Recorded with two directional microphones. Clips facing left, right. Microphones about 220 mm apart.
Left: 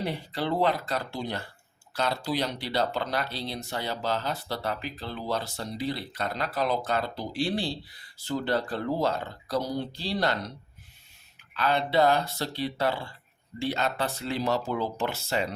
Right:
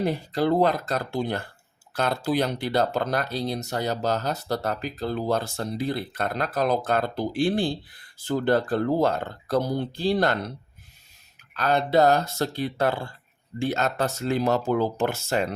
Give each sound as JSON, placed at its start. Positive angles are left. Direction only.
{"t": 0.0, "sound": "speech", "side_deg": -45}
{"t": 11.5, "sound": "speech", "side_deg": -45}